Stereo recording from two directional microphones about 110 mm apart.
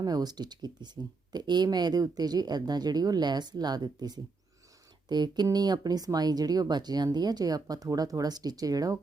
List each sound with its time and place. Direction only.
0.0 s speech: 35° right (ahead or behind)